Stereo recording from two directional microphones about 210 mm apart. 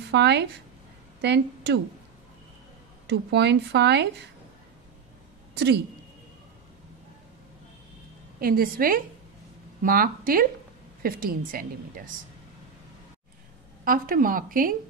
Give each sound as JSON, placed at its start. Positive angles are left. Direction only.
{"t": 0.1, "sound": "speech", "side_deg": -55}
{"t": 3.1, "sound": "speech", "side_deg": -55}
{"t": 8.4, "sound": "speech", "side_deg": -45}
{"t": 13.8, "sound": "speech", "side_deg": -45}